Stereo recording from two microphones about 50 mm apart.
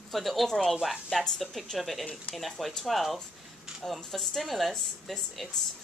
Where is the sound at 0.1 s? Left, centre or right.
Centre.